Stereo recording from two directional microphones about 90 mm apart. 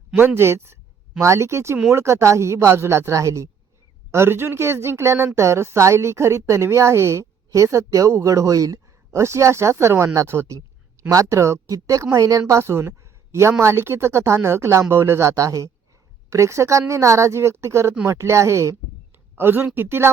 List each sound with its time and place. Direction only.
0.2 s speech: 25° right (ahead or behind)